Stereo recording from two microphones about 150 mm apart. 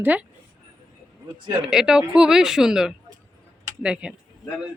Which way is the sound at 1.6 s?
5° right (ahead or behind).